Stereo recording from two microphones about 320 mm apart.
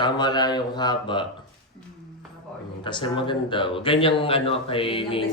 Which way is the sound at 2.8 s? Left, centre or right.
Centre.